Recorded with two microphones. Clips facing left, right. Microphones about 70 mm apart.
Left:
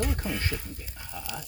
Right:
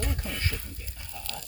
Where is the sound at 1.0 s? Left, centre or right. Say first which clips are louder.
Left 4 dB; left.